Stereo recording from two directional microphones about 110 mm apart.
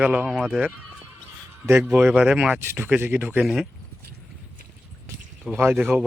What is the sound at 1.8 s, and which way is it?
Speech, 10° right (ahead or behind).